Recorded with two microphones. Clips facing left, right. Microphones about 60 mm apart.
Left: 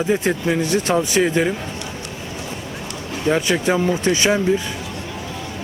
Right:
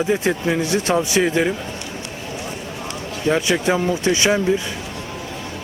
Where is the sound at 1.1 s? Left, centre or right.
Centre.